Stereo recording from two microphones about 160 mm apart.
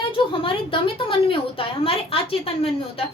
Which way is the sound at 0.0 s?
35° left (ahead or behind).